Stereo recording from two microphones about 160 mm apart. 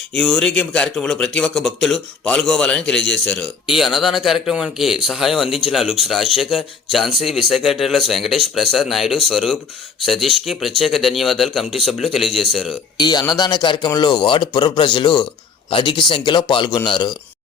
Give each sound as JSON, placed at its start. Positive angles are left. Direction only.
{"t": 0.2, "sound": "a man's voice", "side_deg": 0}
{"t": 13.0, "sound": "speech", "side_deg": 25}